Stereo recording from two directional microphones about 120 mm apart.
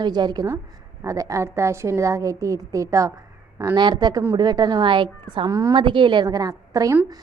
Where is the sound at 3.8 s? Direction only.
40° right (ahead or behind).